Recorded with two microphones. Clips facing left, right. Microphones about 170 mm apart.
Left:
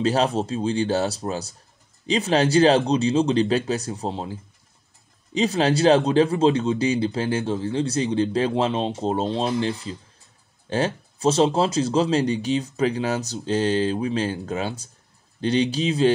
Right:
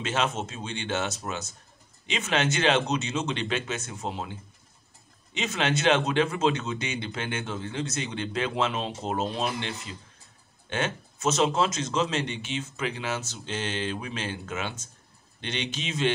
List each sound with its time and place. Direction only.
0.0 s speech: 35° left (ahead or behind)